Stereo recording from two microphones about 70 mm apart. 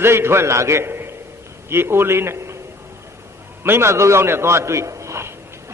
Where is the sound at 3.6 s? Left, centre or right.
Right.